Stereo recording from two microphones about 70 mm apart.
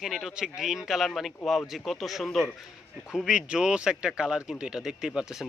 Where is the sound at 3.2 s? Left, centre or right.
Centre.